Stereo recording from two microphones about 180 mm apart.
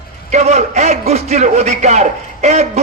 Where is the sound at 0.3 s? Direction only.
40° right (ahead or behind).